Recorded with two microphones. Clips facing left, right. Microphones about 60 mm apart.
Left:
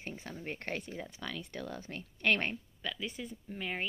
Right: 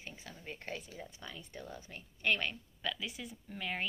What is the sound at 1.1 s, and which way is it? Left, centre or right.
Speech, left.